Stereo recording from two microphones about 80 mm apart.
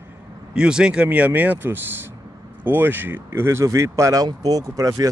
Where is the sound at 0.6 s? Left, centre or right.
Centre.